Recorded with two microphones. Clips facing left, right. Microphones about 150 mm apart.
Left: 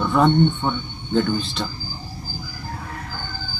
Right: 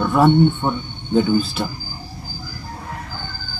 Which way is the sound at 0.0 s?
10° right (ahead or behind).